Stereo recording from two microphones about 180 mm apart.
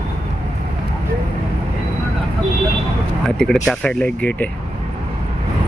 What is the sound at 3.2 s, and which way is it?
Speech, 5° left (ahead or behind).